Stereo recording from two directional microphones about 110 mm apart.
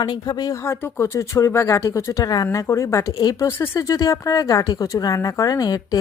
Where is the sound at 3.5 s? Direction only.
25° left (ahead or behind).